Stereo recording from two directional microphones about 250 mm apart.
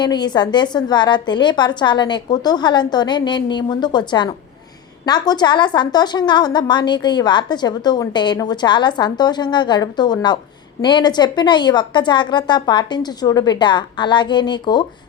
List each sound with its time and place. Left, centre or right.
0.0 s a woman's voice: centre